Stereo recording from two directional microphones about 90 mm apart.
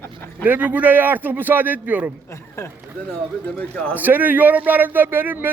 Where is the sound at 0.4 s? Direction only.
20° right (ahead or behind).